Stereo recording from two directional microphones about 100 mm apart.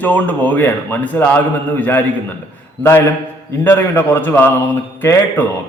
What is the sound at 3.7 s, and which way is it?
A man's voice, 20° left (ahead or behind).